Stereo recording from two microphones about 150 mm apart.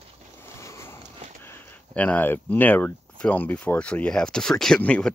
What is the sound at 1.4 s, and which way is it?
Speech, 15° left (ahead or behind).